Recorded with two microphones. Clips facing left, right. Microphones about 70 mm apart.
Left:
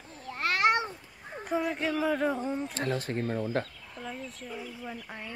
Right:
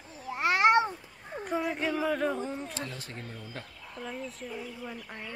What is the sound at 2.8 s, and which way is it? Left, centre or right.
Speech, left.